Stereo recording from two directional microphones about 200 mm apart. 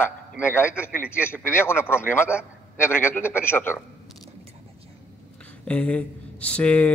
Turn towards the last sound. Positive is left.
turn(degrees=5)  # may be behind; listen again after turning